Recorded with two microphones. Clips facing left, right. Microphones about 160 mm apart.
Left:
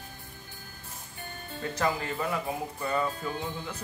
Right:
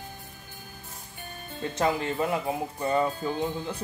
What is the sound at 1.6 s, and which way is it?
Speech, 25° right (ahead or behind).